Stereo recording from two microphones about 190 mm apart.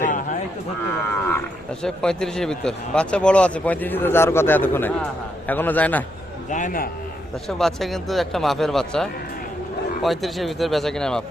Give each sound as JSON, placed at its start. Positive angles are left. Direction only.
{"t": 0.0, "sound": "a sound", "side_deg": 45}
{"t": 1.8, "sound": "speech", "side_deg": 5}
{"t": 6.5, "sound": "a man's voice", "side_deg": 45}
{"t": 7.4, "sound": "speech", "side_deg": 0}